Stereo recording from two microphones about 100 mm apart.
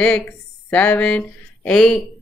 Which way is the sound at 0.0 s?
10° left (ahead or behind).